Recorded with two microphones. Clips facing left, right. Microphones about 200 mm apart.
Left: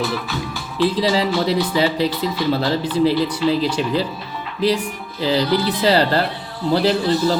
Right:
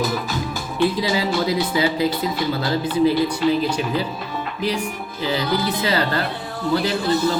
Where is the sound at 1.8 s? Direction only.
30° left (ahead or behind).